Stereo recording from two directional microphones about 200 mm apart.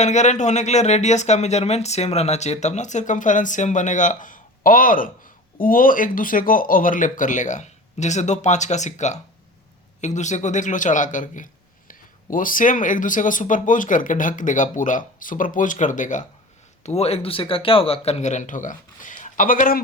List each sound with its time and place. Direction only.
0.0 s speech: 35° left (ahead or behind)